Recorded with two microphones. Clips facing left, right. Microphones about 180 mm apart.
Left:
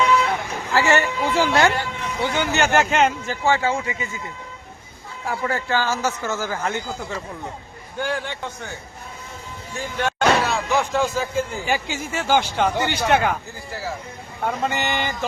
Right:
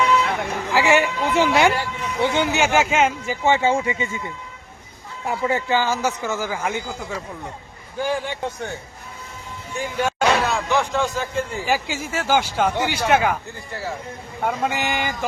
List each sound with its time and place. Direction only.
0.7 s a man's voice: 10° right (ahead or behind)
2.2 s speech: 25° right (ahead or behind)
2.5 s a man's voice: 5° right (ahead or behind)
3.4 s speech: 20° right (ahead or behind)
5.2 s a man's voice: 20° right (ahead or behind)
10.0 s a sound: 5° right (ahead or behind)
10.7 s a man's voice: 5° left (ahead or behind)